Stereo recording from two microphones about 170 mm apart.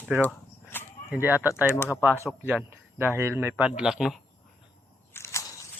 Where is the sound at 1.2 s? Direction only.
10° right (ahead or behind).